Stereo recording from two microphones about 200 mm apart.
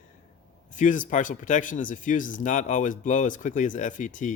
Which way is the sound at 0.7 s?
40° left (ahead or behind).